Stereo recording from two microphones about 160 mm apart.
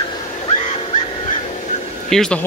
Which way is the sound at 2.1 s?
5° left (ahead or behind).